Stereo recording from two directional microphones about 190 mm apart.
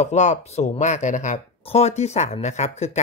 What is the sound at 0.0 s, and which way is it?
Speech, 40° left (ahead or behind).